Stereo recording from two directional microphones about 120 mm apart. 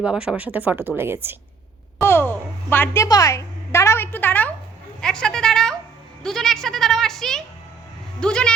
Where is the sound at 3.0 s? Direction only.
30° left (ahead or behind); by 7.4 s 5° left (ahead or behind).